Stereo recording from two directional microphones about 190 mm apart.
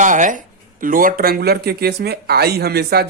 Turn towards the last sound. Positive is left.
turn(degrees=-55)  # may be behind; listen again after turning